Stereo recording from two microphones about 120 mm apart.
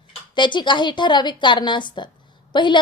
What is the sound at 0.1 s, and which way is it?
A woman's voice, 40° left (ahead or behind).